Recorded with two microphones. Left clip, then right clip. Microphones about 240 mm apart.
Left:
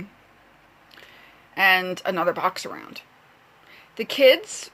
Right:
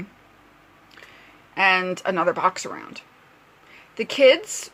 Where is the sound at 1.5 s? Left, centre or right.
Centre.